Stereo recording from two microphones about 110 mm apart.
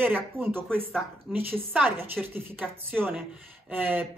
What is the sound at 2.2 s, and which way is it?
A woman's voice, 5° right (ahead or behind).